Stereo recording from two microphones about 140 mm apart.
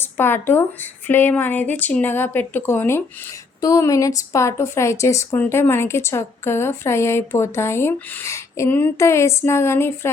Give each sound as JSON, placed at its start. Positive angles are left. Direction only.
{"t": 0.0, "sound": "a woman's voice", "side_deg": 15}